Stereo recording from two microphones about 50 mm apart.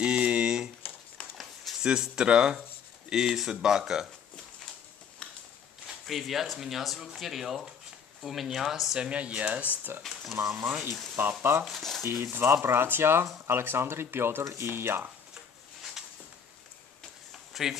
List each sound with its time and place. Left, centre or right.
0.0 s a sound: right
1.8 s speech: centre
5.2 s a sound: centre
6.0 s speech: centre
8.9 s speech: right
9.9 s speech: right
11.6 s speech: centre
12.0 s speech: right
14.4 s speech: right
14.7 s speech: right
17.3 s a sound: centre